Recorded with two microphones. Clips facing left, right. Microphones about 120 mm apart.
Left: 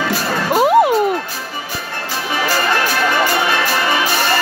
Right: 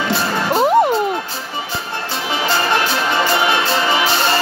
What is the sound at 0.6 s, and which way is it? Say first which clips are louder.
Music: left 2 dB; 5° left (ahead or behind).